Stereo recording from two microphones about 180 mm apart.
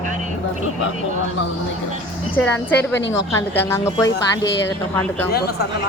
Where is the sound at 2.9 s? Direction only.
85° left.